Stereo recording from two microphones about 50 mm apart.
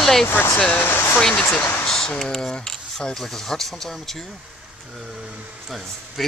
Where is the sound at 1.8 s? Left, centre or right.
Centre.